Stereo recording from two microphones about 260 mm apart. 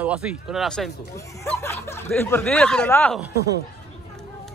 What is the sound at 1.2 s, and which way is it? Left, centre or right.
A man's voice, centre.